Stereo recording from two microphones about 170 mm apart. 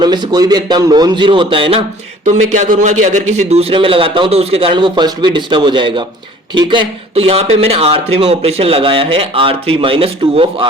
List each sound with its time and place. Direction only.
0.0 s a man's voice: 25° right (ahead or behind)
2.2 s speech: 45° right (ahead or behind)